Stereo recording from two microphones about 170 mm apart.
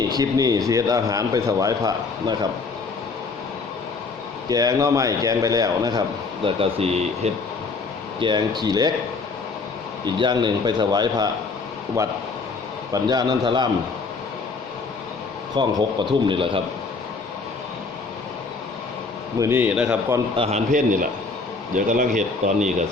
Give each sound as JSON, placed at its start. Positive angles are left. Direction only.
{"t": 0.1, "sound": "a man's voice", "side_deg": -20}
{"t": 4.4, "sound": "a man's voice", "side_deg": -20}
{"t": 6.4, "sound": "speech", "side_deg": -35}
{"t": 8.2, "sound": "a man's voice", "side_deg": -25}
{"t": 10.2, "sound": "a man's voice", "side_deg": -25}
{"t": 15.5, "sound": "a man's voice", "side_deg": -25}
{"t": 19.4, "sound": "a man's voice", "side_deg": -15}
{"t": 20.3, "sound": "speech", "side_deg": -35}
{"t": 20.7, "sound": "a man's voice", "side_deg": -50}